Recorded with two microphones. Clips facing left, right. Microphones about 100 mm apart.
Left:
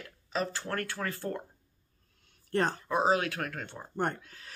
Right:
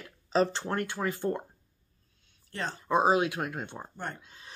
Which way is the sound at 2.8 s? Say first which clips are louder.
Right 8 dB; 20° right (ahead or behind).